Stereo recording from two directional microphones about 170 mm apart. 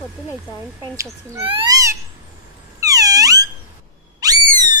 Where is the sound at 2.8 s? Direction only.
20° right (ahead or behind).